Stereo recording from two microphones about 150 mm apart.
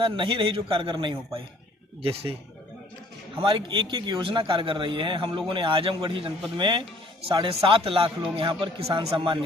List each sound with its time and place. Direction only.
0.0 s a man's voice: 35° right (ahead or behind)
3.4 s a man's voice: 35° right (ahead or behind)